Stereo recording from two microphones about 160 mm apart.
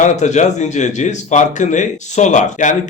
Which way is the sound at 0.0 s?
45° left (ahead or behind).